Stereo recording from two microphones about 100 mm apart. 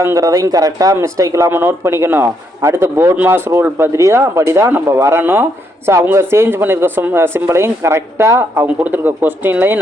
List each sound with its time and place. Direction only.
0.0 s a man's voice: 30° right (ahead or behind)